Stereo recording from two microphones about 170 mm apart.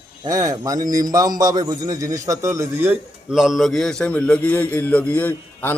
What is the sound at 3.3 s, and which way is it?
A man's voice, centre (ahead or behind).